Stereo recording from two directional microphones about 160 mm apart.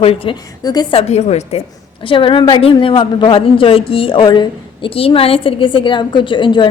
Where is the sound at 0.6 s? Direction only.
25° left (ahead or behind).